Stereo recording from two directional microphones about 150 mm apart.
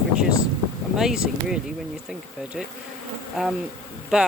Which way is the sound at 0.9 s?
5° right (ahead or behind).